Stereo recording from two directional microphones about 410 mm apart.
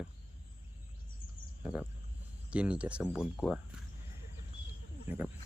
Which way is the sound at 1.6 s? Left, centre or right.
Centre.